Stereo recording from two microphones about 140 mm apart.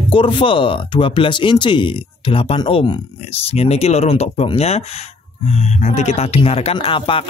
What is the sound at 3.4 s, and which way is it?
Speech, 45° left (ahead or behind).